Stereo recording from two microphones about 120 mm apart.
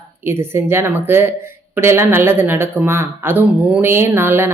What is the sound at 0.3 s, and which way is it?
Speech, 20° right (ahead or behind).